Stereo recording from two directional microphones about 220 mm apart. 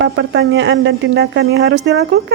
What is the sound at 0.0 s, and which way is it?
Speech, 55° right (ahead or behind).